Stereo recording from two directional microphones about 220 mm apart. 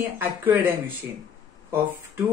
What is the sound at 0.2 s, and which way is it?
Speech, 10° right (ahead or behind).